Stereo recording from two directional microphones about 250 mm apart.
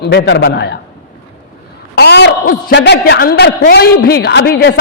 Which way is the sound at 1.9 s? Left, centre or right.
Left.